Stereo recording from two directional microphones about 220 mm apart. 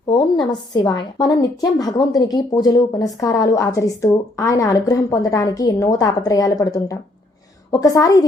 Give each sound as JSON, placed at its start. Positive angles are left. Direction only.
{"t": 0.1, "sound": "speech", "side_deg": 20}